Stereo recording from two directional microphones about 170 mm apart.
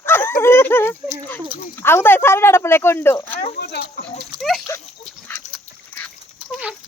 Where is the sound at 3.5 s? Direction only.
70° left (ahead or behind).